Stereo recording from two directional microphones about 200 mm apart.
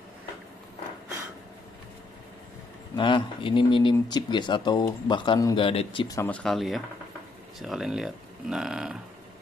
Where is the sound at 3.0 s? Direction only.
25° left (ahead or behind).